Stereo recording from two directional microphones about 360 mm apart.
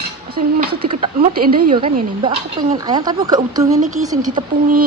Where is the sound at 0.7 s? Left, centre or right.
Centre.